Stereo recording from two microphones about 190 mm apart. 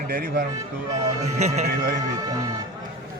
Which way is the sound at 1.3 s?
35° right (ahead or behind).